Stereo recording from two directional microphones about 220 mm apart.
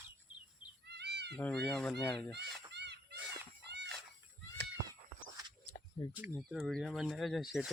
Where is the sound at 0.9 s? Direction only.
50° right (ahead or behind).